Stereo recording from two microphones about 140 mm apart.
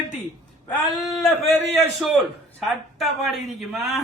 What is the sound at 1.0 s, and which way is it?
A man's voice, centre (ahead or behind).